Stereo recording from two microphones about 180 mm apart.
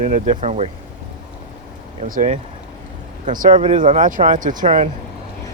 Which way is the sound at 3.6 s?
35° right (ahead or behind).